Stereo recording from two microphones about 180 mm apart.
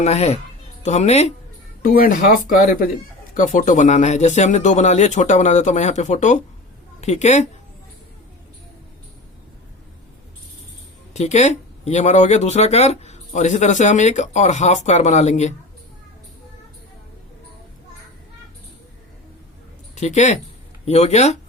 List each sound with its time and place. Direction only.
0.0 s speech: 35° left (ahead or behind)
1.8 s a woman's voice: 50° left (ahead or behind)
11.1 s speech: 40° left (ahead or behind)
20.0 s speech: 40° left (ahead or behind)